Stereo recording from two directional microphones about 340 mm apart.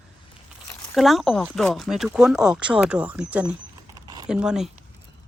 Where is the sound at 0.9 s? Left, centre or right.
Centre.